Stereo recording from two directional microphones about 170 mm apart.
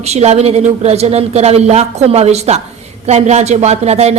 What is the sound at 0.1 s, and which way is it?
Speech, 40° right (ahead or behind).